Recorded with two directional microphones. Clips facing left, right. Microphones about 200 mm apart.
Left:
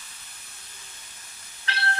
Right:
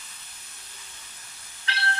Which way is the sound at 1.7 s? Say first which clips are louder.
Left 1 dB; 45° left (ahead or behind).